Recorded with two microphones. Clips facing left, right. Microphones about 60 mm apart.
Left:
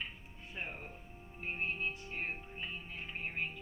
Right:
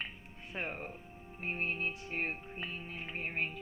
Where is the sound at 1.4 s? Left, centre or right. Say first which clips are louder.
Right 2 dB; right.